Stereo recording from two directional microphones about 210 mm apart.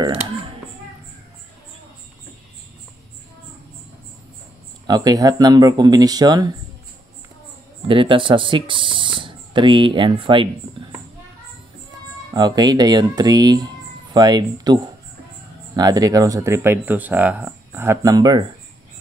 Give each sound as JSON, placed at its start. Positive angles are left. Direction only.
{"t": 4.8, "sound": "speech", "side_deg": -20}
{"t": 7.9, "sound": "speech", "side_deg": -25}
{"t": 12.4, "sound": "speech", "side_deg": -20}